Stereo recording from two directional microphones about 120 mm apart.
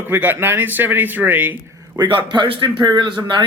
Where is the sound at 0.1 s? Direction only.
15° right (ahead or behind).